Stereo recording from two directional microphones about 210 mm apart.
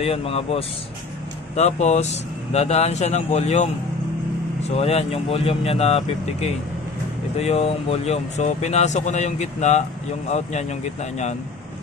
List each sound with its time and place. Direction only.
0.0 s speech: 25° left (ahead or behind)
4.6 s speech: 30° left (ahead or behind)